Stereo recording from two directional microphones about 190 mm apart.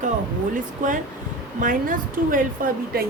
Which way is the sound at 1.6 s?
45° right (ahead or behind).